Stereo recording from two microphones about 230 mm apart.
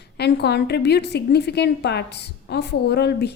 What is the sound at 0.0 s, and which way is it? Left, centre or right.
A woman's voice, left.